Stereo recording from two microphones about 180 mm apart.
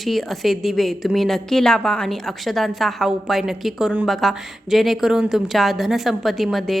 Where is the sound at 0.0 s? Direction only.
Centre (ahead or behind).